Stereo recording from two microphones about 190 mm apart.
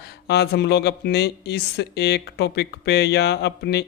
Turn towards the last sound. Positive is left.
turn(degrees=60)  # may be behind; listen again after turning